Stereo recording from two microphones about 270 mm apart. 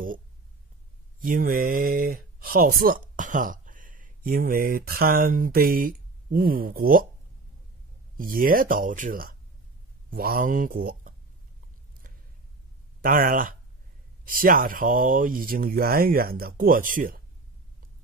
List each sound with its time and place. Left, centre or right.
1.2 s speech: right
8.2 s speech: right
13.0 s speech: right